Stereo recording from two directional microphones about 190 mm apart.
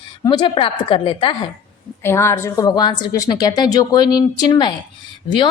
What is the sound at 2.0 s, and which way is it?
A woman's voice, 15° left (ahead or behind).